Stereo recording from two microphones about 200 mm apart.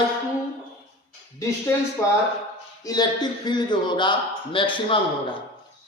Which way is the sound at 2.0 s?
15° left (ahead or behind).